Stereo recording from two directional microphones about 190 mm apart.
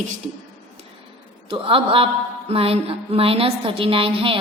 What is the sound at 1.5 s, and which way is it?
A woman's voice, 30° right (ahead or behind).